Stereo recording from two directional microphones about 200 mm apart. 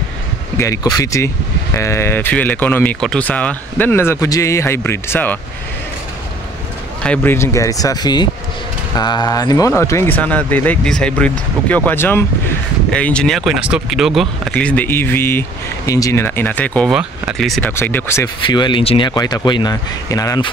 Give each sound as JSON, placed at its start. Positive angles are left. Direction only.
{"t": 0.6, "sound": "speech", "side_deg": 15}
{"t": 7.0, "sound": "speech", "side_deg": 10}